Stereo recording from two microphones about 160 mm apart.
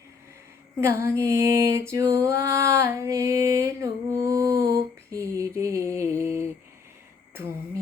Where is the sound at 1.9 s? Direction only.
20° right (ahead or behind).